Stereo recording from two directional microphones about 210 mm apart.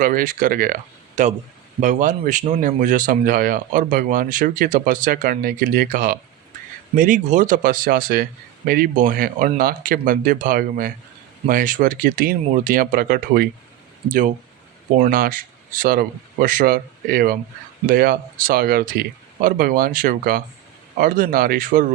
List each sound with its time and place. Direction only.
0.0 s speech: 40° right (ahead or behind)